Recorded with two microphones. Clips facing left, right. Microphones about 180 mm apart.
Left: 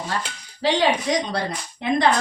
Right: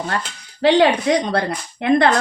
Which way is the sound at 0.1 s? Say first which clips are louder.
Right 3 dB; 60° right (ahead or behind).